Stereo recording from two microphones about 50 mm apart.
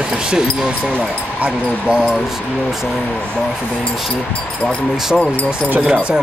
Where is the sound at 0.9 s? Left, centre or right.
Right.